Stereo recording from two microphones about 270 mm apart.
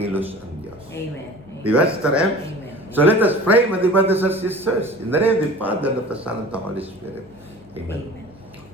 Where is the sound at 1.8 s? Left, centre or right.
Centre.